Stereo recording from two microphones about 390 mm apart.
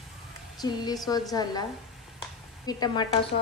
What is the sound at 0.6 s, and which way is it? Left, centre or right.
A woman's voice, centre.